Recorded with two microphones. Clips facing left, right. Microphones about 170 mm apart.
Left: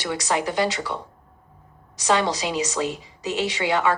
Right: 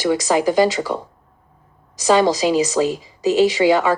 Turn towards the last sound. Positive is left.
turn(degrees=-40)  # may be behind; listen again after turning